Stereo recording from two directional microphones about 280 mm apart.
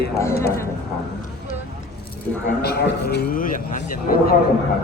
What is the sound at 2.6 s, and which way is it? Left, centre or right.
A man's voice, left.